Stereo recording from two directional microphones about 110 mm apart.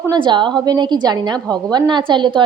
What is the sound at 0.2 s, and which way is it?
A woman's voice, 45° right (ahead or behind).